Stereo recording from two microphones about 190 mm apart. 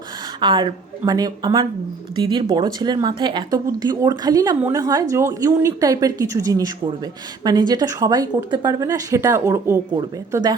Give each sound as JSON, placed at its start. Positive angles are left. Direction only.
{"t": 0.3, "sound": "a woman's voice", "side_deg": -25}